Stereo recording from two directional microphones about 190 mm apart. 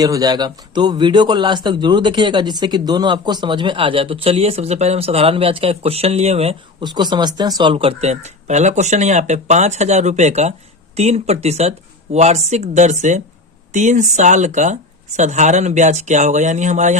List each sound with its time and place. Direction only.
0.0 s a man's voice: 20° right (ahead or behind); by 17.0 s 40° right (ahead or behind)